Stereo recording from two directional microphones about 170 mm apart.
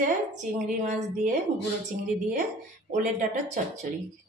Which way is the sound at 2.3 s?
45° right (ahead or behind).